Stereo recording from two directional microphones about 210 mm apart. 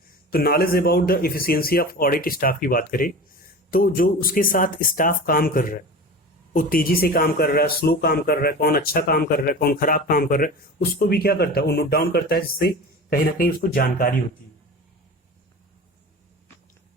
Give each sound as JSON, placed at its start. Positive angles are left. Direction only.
{"t": 0.3, "sound": "speech", "side_deg": 45}